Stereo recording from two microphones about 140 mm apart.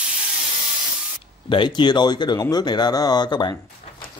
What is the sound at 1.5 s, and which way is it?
Speech, 35° left (ahead or behind).